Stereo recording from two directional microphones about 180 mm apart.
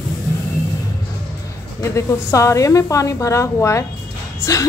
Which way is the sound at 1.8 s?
15° left (ahead or behind).